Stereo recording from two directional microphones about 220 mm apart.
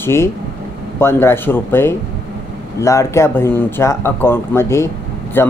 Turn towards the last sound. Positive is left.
turn(degrees=10)  # may be behind; listen again after turning